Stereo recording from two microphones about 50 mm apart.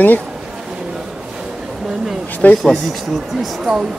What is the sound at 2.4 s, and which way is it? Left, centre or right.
Speech, left.